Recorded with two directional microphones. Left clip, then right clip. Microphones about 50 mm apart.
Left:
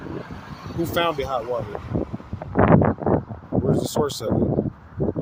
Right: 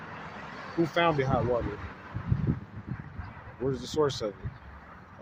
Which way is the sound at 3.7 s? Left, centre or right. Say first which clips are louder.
Left 4 dB; left.